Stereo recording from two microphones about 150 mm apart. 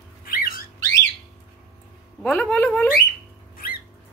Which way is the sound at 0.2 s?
75° left (ahead or behind).